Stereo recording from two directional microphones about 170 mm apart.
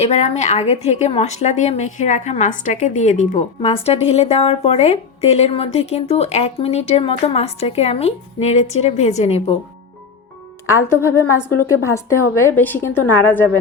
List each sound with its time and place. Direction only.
0.0 s a woman's voice: 40° left (ahead or behind)
10.8 s a woman's voice: 15° left (ahead or behind)